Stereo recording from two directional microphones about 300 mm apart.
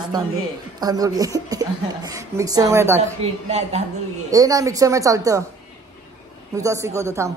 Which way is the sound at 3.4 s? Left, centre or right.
Right.